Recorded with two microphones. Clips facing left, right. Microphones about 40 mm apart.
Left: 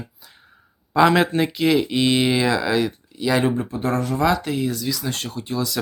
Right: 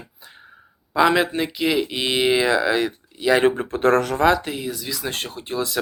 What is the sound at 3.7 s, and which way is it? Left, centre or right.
Speech, right.